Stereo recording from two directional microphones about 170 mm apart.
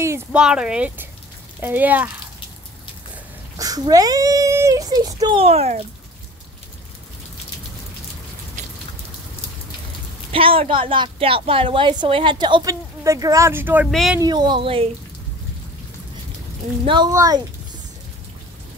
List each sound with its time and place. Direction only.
0.0 s speech: 15° right (ahead or behind)
0.4 s speech: 5° right (ahead or behind)
3.5 s speech: 20° right (ahead or behind)
5.4 s speech: 40° right (ahead or behind)
10.3 s a woman's voice: 35° right (ahead or behind); by 13.8 s 10° right (ahead or behind)
13.8 s speech: centre (ahead or behind)
14.2 s a woman's voice: 25° right (ahead or behind)
16.8 s a woman's voice: 30° right (ahead or behind)